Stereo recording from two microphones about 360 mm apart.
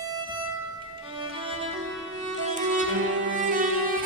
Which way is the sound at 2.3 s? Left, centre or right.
Centre.